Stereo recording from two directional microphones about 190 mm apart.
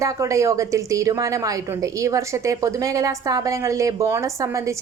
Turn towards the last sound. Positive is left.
turn(degrees=-15)  # may be behind; listen again after turning